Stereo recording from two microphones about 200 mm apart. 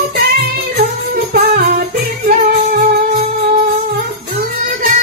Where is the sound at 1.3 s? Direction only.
50° right (ahead or behind).